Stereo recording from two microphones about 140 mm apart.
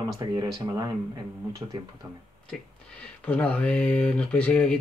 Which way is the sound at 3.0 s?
10° left (ahead or behind).